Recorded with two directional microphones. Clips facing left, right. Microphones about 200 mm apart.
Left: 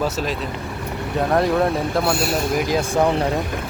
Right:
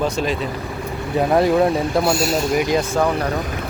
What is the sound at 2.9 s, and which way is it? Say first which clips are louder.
Speech: left 1 dB; 20° left (ahead or behind).